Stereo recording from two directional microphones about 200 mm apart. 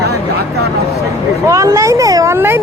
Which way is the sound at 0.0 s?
55° right (ahead or behind).